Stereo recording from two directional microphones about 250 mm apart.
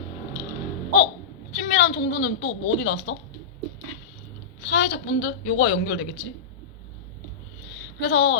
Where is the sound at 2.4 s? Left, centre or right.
Left.